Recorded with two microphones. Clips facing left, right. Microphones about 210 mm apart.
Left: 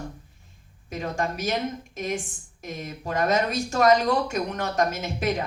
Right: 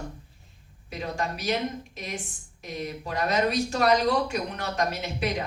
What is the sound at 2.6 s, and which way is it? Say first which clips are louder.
A woman's voice: right 1 dB; 45° left (ahead or behind).